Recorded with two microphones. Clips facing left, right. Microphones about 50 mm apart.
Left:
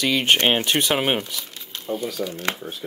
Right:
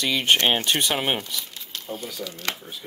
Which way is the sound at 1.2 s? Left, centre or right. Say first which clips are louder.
Even; left.